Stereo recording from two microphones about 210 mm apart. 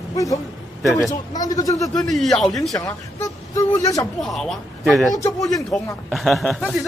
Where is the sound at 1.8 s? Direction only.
Centre (ahead or behind).